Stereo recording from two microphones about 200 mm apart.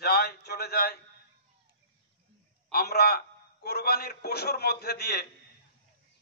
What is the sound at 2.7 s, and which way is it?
A man's voice, 50° left (ahead or behind).